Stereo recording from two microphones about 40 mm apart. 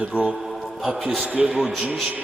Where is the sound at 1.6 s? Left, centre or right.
Centre.